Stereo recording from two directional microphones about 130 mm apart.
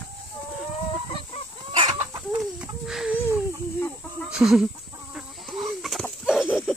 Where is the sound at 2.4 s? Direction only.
5° right (ahead or behind).